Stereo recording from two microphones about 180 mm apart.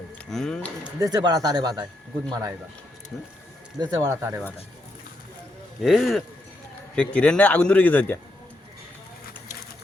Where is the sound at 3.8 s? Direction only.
15° right (ahead or behind).